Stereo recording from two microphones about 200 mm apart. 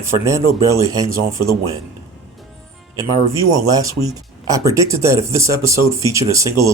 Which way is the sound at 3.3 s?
15° right (ahead or behind).